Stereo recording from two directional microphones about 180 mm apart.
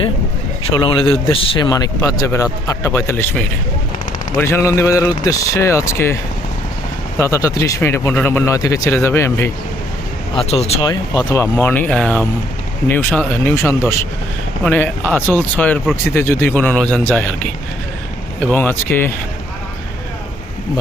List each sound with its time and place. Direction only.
0.7 s speech: 25° left (ahead or behind)
7.2 s speech: 15° left (ahead or behind)
10.3 s speech: 35° left (ahead or behind)
11.1 s speech: 20° left (ahead or behind)
11.5 s speech: 10° left (ahead or behind)